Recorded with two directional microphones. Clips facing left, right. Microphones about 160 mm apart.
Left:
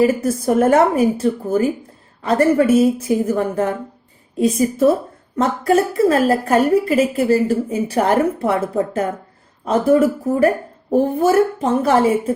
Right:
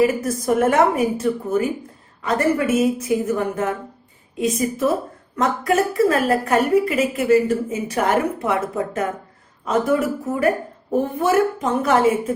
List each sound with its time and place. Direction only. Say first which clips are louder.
0.0 s a woman's voice: left 3 dB; 30° left (ahead or behind)